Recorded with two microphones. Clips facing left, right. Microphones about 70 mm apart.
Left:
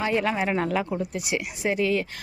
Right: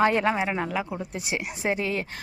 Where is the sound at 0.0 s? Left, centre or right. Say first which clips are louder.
Right 3 dB; right.